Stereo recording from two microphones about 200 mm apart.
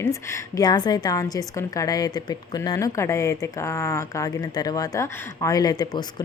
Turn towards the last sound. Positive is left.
turn(degrees=20)  # may be behind; listen again after turning